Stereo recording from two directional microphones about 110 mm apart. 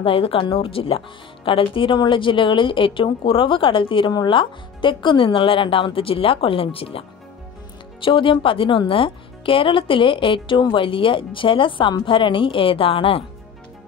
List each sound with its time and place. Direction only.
0.0 s speech: 55° left (ahead or behind)